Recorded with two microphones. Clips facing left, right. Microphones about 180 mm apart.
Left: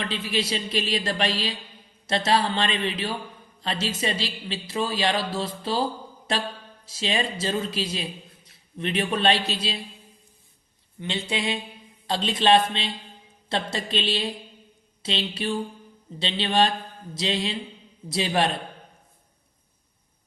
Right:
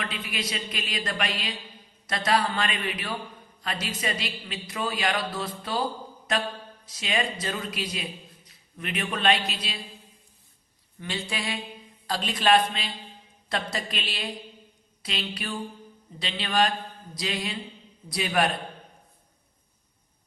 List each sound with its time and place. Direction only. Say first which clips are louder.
0.0 s a man's voice: left 6 dB; 30° left (ahead or behind)
6.8 s a man's voice: left 2 dB; 30° left (ahead or behind)
11.3 s a man's voice: left 5 dB; 25° left (ahead or behind)